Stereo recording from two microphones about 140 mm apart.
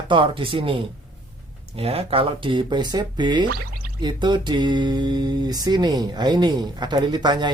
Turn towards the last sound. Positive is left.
turn(degrees=-30)  # may be behind; listen again after turning